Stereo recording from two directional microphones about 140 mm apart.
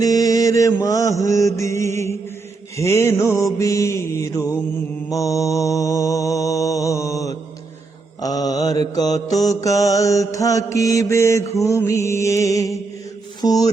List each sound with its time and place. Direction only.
0.0 s mantra: 25° left (ahead or behind)
13.4 s speech: 25° left (ahead or behind)